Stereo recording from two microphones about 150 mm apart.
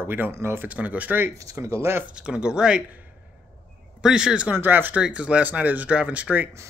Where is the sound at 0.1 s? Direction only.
15° right (ahead or behind).